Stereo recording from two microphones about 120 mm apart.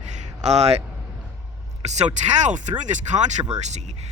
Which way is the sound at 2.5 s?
85° right.